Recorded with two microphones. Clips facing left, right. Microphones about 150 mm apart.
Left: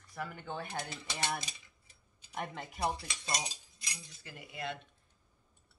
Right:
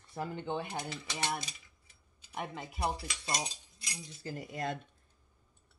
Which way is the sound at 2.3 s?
5° right (ahead or behind).